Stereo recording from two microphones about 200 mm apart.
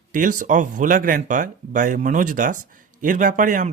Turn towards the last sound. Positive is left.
turn(degrees=-40)  # may be behind; listen again after turning